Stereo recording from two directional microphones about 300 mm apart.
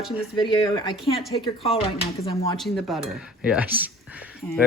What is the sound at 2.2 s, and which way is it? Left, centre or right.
Speech, centre.